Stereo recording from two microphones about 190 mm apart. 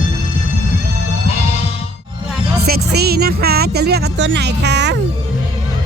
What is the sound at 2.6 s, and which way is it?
Music, 55° right (ahead or behind).